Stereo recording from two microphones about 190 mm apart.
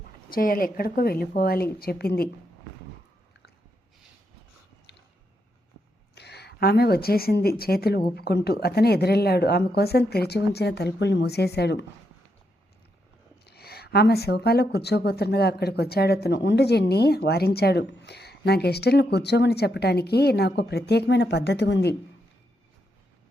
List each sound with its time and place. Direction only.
0.3 s a woman's voice: 50° left (ahead or behind)
6.1 s speech: 60° left (ahead or behind)
13.4 s speech: 55° left (ahead or behind)